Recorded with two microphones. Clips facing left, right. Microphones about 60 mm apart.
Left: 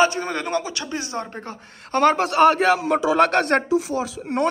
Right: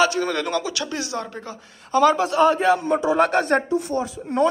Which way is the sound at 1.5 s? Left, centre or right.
Left.